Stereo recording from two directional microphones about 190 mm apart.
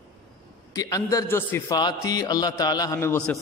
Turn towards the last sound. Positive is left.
turn(degrees=15)  # may be behind; listen again after turning